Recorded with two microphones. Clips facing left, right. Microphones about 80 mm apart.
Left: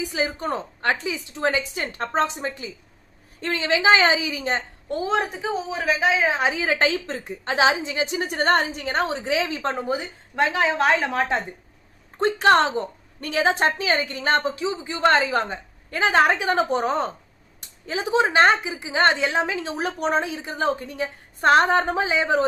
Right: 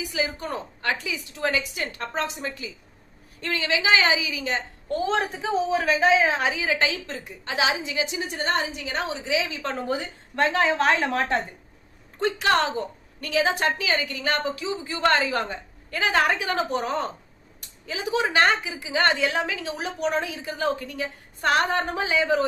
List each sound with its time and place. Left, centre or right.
0.0 s a woman's voice: left
5.0 s a woman's voice: centre
6.2 s a woman's voice: centre
6.5 s a woman's voice: left
9.7 s a woman's voice: centre
12.2 s a woman's voice: left